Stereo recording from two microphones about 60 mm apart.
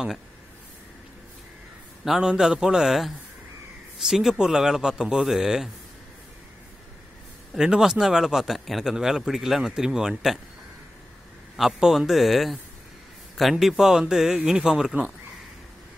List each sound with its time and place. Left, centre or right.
2.0 s a man's voice: centre
7.5 s a man's voice: centre
11.5 s a man's voice: centre